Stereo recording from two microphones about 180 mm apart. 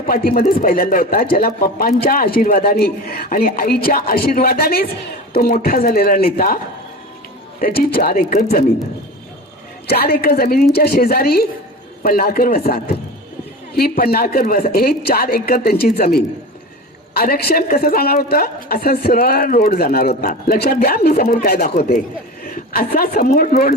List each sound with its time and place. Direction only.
0.1 s a woman's voice: 55° left (ahead or behind)
7.6 s speech: 55° left (ahead or behind)
9.9 s a woman's voice: 60° left (ahead or behind)